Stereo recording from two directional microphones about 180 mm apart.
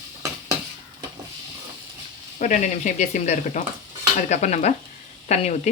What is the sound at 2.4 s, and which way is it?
Speech, 40° left (ahead or behind).